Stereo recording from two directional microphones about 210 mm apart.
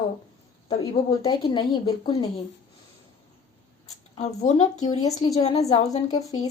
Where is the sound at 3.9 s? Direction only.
30° left (ahead or behind).